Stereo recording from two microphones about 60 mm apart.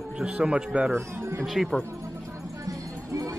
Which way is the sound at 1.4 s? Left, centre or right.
Centre.